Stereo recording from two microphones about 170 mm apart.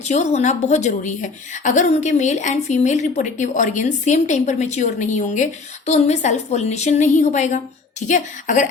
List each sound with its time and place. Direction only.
0.1 s a woman's voice: 45° left (ahead or behind)